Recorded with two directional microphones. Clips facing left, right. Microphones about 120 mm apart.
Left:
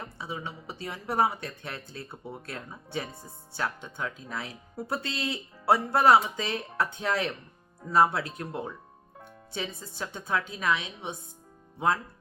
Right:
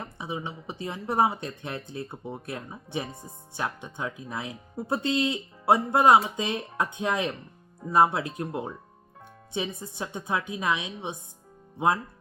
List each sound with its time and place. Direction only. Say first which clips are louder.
0.0 s speech: right 3 dB; 20° right (ahead or behind)